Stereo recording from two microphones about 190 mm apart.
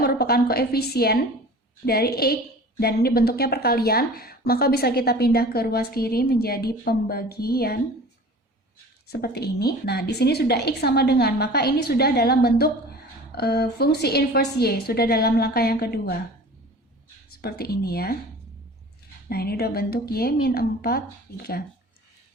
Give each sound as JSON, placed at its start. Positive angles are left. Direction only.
{"t": 0.0, "sound": "a woman's voice", "side_deg": 55}
{"t": 9.0, "sound": "a woman's voice", "side_deg": 55}
{"t": 17.3, "sound": "a woman's voice", "side_deg": 55}
{"t": 19.3, "sound": "a woman's voice", "side_deg": 55}